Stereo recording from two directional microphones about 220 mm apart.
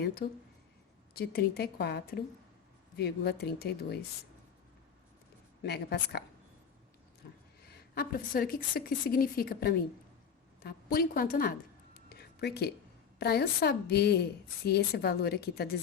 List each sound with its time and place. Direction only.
0.0 s a woman's voice: 45° left (ahead or behind)
5.6 s a woman's voice: 50° left (ahead or behind)
7.6 s a woman's voice: 45° left (ahead or behind)
12.0 s a sound: 45° left (ahead or behind)
13.1 s a woman's voice: 45° left (ahead or behind)